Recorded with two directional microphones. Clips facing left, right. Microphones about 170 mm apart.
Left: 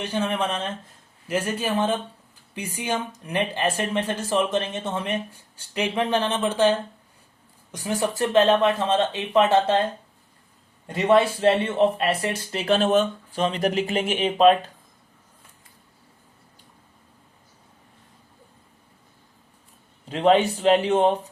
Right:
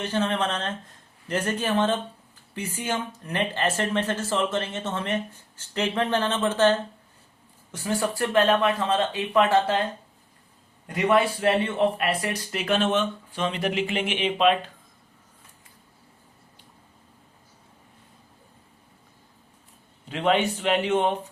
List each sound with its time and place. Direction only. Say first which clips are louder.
0.0 s speech: even; 10° left (ahead or behind)
10.8 s speech: left 3 dB; 25° left (ahead or behind)
20.1 s speech: left 4 dB; 35° left (ahead or behind)